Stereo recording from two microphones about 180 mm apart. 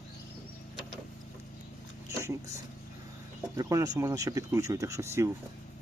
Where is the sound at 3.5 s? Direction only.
20° right (ahead or behind).